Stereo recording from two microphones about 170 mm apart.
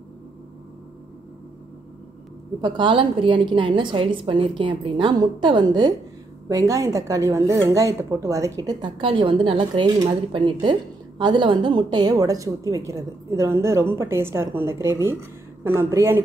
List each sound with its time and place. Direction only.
2.6 s a woman's voice: 30° right (ahead or behind); by 16.2 s 15° right (ahead or behind)